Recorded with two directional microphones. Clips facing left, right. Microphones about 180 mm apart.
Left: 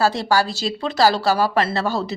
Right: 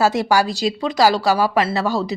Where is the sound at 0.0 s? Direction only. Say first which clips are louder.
Right 2 dB; 20° right (ahead or behind).